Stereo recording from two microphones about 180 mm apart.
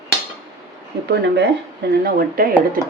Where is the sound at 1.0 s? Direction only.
70° right (ahead or behind).